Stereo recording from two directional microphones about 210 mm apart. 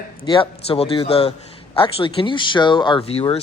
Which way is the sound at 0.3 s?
20° left (ahead or behind).